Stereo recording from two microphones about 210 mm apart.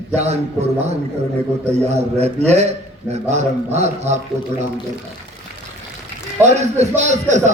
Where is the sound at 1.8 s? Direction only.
30° right (ahead or behind).